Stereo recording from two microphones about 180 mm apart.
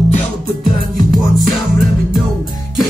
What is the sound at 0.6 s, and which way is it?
Music, 50° right (ahead or behind).